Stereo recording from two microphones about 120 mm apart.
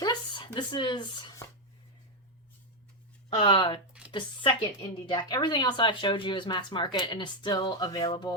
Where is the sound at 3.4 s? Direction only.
45° left (ahead or behind).